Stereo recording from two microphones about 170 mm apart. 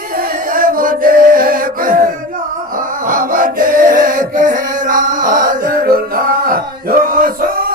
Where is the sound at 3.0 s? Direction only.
55° right (ahead or behind).